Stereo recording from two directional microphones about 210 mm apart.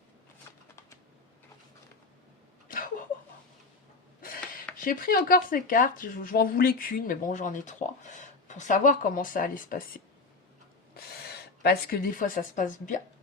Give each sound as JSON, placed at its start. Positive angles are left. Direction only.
{"t": 2.6, "sound": "a sound", "side_deg": 40}
{"t": 4.8, "sound": "speech", "side_deg": 45}
{"t": 11.6, "sound": "speech", "side_deg": 45}